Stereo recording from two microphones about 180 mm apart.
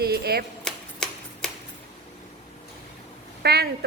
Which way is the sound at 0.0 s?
60° right (ahead or behind).